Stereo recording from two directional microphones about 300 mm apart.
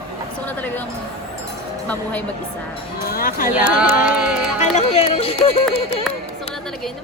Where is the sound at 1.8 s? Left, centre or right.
Centre.